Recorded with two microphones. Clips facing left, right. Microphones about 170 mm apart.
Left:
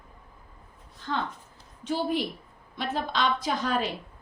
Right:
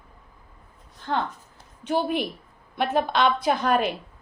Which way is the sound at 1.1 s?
55° right (ahead or behind).